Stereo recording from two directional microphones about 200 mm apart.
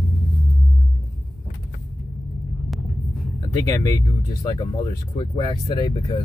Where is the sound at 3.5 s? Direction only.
15° left (ahead or behind).